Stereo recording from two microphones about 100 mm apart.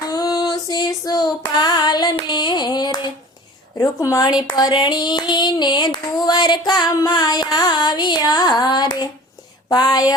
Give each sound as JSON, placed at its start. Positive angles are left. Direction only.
{"t": 0.1, "sound": "female singing", "side_deg": 40}
{"t": 1.5, "sound": "hands", "side_deg": 45}
{"t": 3.8, "sound": "a woman's voice", "side_deg": 35}
{"t": 4.4, "sound": "female singing", "side_deg": 45}
{"t": 9.6, "sound": "a woman's voice", "side_deg": 40}